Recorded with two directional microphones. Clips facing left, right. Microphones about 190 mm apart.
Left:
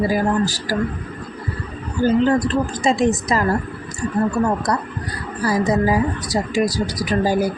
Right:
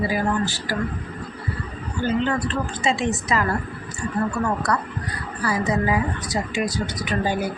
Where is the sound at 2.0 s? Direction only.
40° left (ahead or behind).